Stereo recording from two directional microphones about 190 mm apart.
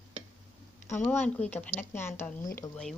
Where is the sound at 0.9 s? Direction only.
10° left (ahead or behind).